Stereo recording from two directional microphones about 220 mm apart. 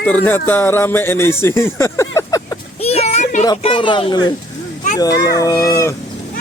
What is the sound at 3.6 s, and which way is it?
Speech, 25° left (ahead or behind).